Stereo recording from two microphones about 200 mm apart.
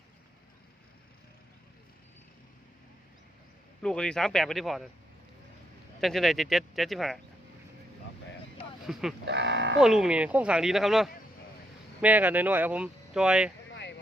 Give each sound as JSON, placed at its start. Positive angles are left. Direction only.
{"t": 3.8, "sound": "speech", "side_deg": 5}
{"t": 6.0, "sound": "speech", "side_deg": 0}
{"t": 8.9, "sound": "speech", "side_deg": 0}
{"t": 9.2, "sound": "speech", "side_deg": -60}
{"t": 9.8, "sound": "speech", "side_deg": -5}